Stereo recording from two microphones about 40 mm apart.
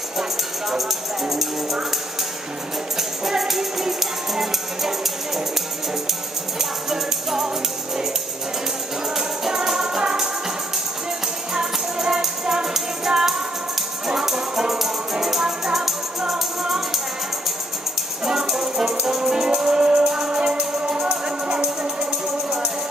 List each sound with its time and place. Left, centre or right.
0.2 s music: centre
3.0 s music: centre
6.6 s music: centre
9.1 s music: centre
11.5 s music: centre
18.2 s music: centre